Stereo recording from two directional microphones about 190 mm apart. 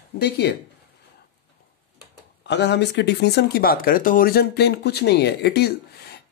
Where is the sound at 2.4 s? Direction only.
65° left (ahead or behind).